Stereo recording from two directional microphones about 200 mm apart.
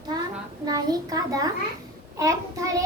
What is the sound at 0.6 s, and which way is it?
A child's voice, 20° right (ahead or behind).